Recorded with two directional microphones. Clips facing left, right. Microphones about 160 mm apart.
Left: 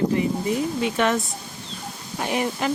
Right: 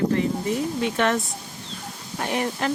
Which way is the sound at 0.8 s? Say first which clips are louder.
Even; 5° left (ahead or behind).